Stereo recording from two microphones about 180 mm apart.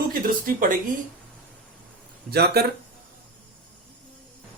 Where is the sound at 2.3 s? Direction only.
65° right (ahead or behind).